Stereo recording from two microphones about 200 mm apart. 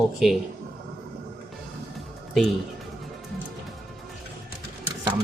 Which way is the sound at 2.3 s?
Centre (ahead or behind).